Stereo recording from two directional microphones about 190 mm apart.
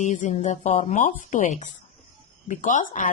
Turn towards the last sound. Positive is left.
turn(degrees=40)  # may be behind; listen again after turning